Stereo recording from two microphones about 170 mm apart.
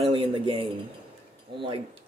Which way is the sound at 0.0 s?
30° right (ahead or behind).